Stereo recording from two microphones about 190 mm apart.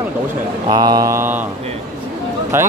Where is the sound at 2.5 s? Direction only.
15° right (ahead or behind).